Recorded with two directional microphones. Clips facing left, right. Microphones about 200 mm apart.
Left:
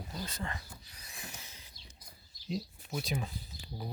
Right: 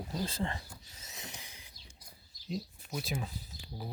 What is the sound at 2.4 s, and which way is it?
Speech, centre (ahead or behind).